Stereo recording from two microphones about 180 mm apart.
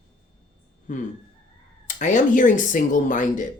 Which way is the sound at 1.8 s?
45° left (ahead or behind).